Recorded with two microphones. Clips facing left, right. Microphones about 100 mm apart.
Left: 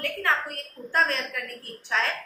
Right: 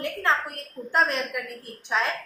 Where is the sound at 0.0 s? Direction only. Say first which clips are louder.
Right 2 dB; 20° right (ahead or behind).